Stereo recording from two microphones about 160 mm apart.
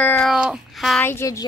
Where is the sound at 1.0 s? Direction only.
15° left (ahead or behind).